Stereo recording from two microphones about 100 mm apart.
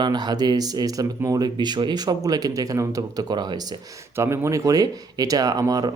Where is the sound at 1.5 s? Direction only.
50° right (ahead or behind).